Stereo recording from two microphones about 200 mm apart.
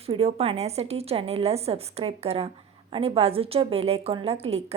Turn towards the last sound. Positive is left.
turn(degrees=-30)  # may be behind; listen again after turning